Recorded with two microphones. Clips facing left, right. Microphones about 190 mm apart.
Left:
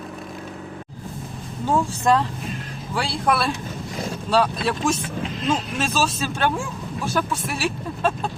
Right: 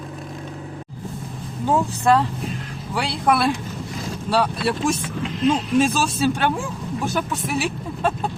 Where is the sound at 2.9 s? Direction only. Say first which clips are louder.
Right 2 dB; 15° right (ahead or behind).